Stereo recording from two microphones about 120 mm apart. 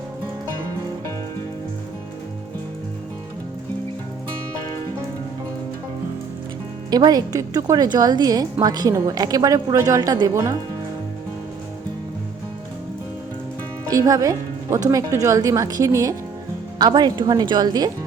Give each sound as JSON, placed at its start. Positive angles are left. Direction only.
{"t": 6.9, "sound": "a woman's voice", "side_deg": -35}
{"t": 13.9, "sound": "a woman's voice", "side_deg": -30}